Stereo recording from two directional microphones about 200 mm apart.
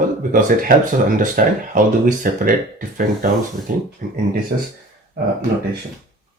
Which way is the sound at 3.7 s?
40° right (ahead or behind).